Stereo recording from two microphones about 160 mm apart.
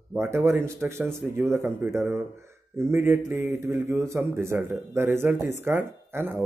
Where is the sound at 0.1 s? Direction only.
15° right (ahead or behind).